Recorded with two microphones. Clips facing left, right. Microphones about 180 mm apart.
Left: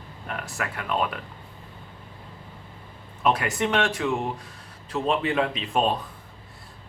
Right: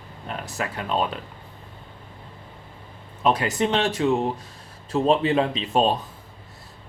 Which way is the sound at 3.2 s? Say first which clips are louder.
Right 2 dB; 25° right (ahead or behind).